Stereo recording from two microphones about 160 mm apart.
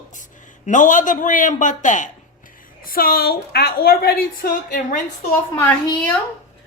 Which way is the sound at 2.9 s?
65° left (ahead or behind).